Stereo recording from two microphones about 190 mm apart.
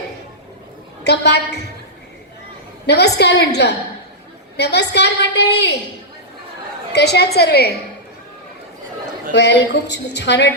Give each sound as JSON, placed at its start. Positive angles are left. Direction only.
{"t": 1.0, "sound": "a woman's voice", "side_deg": 60}
{"t": 2.8, "sound": "a woman's voice", "side_deg": 60}
{"t": 6.9, "sound": "a woman's voice", "side_deg": 60}
{"t": 9.3, "sound": "a woman's voice", "side_deg": 65}